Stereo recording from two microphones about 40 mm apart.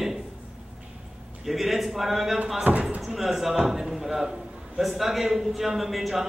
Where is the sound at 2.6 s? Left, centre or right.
Right.